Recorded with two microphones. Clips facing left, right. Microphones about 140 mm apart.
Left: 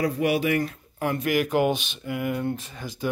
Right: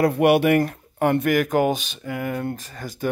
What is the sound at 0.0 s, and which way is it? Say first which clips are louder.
Speech: right 6 dB; 65° right (ahead or behind).